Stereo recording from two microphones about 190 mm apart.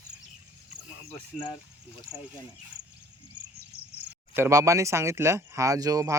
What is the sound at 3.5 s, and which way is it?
Cricket, 55° right (ahead or behind).